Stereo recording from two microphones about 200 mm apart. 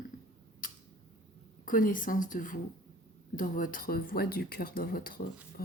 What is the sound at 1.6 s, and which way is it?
Speech, 40° left (ahead or behind).